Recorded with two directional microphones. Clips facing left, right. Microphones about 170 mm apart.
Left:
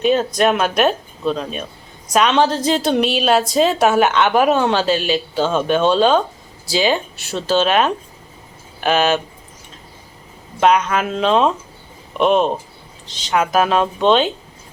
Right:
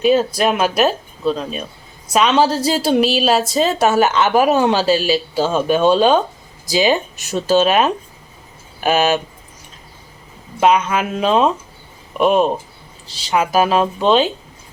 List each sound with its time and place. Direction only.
0.0 s a woman's voice: 5° right (ahead or behind)
10.6 s a woman's voice: 5° right (ahead or behind)